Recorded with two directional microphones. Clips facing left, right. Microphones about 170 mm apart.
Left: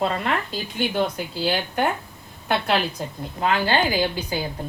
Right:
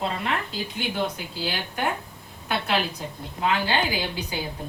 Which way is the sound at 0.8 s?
50° left (ahead or behind).